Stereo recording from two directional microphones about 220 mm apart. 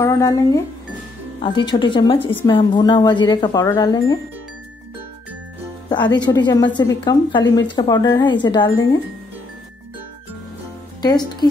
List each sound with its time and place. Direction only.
0.0 s speech: 15° left (ahead or behind)
1.7 s a woman's voice: 20° left (ahead or behind)
5.9 s a woman's voice: 20° left (ahead or behind)
11.0 s speech: 20° left (ahead or behind)